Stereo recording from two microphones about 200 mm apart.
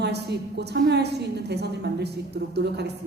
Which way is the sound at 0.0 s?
55° right (ahead or behind).